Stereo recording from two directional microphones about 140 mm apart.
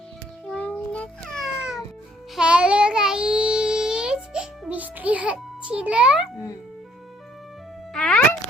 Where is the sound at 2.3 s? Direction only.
5° right (ahead or behind).